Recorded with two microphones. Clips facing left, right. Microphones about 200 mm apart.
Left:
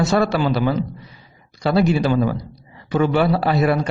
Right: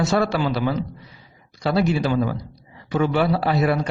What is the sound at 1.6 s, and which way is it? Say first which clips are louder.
A man's voice: left 3 dB; 60° left (ahead or behind).